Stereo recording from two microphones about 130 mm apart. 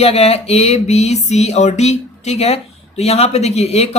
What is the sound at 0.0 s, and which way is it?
Speech, 50° left (ahead or behind).